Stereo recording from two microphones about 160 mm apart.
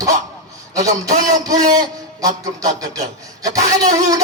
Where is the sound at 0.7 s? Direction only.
20° right (ahead or behind).